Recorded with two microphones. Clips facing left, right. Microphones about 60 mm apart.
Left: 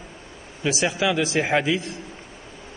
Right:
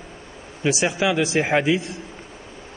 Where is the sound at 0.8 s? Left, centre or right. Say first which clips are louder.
Even; centre.